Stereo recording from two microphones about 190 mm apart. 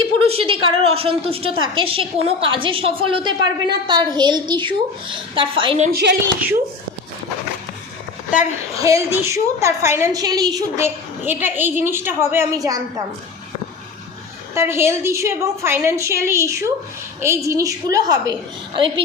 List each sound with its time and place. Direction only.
0.0 s a woman's voice: 30° right (ahead or behind)
5.9 s a woman's voice: 60° right (ahead or behind)
8.8 s a woman's voice: 15° right (ahead or behind)
14.5 s a woman's voice: 15° right (ahead or behind)